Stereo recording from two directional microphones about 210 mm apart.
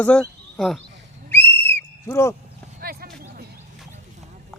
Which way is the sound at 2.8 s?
45° right (ahead or behind).